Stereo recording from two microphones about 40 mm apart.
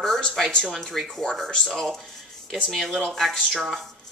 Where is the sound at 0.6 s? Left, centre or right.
Centre.